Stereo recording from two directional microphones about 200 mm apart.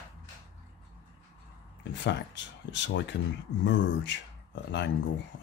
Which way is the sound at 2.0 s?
60° left (ahead or behind).